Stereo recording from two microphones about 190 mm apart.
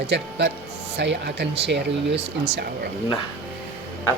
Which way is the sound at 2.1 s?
30° right (ahead or behind).